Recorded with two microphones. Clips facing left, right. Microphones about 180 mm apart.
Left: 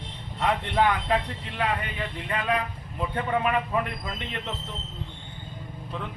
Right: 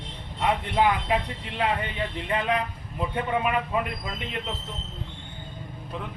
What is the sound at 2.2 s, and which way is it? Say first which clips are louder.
Speech: right 1 dB; 25° right (ahead or behind).